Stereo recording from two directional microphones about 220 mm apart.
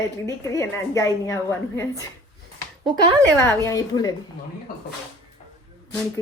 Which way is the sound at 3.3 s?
10° left (ahead or behind).